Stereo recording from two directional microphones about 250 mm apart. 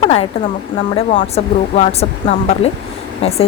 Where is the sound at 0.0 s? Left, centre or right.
Left.